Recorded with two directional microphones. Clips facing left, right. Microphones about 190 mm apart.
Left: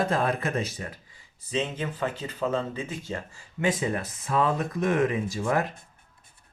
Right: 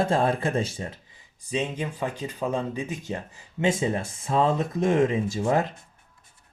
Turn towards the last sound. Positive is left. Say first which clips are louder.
# right 3 dB
turn(degrees=-25)  # may be behind; listen again after turning